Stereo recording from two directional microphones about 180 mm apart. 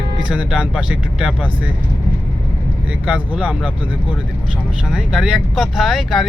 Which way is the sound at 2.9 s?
5° right (ahead or behind).